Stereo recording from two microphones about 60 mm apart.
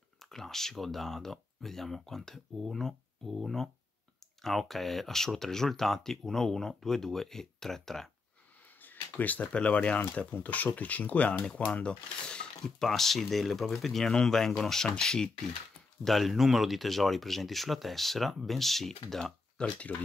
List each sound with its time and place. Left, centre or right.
0.2 s speech: centre
8.8 s speech: left; by 19.7 s centre